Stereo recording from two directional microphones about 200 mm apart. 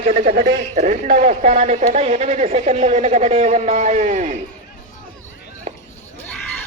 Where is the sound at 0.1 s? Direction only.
45° right (ahead or behind).